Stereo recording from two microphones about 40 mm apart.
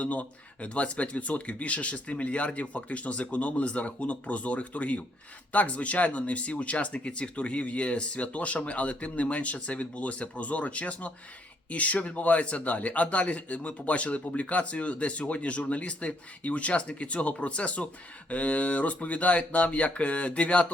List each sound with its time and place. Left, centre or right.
0.0 s speech: left